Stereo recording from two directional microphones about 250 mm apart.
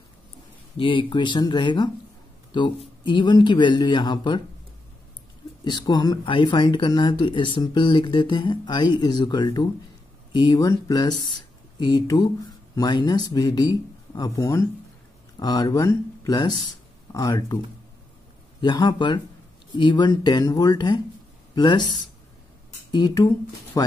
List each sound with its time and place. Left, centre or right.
0.7 s speech: centre
5.6 s speech: centre
18.6 s speech: centre
22.8 s speech: centre